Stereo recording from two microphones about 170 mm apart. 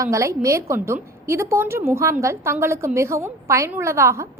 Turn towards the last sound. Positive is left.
turn(degrees=-15)  # may be behind; listen again after turning